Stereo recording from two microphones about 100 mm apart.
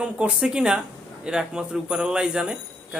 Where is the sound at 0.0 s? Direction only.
10° right (ahead or behind).